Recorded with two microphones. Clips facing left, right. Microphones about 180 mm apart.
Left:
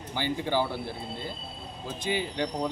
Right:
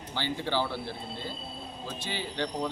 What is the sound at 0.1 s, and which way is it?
Speech, 15° left (ahead or behind).